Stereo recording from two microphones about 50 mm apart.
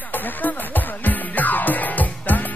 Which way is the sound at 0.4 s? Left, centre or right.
Left.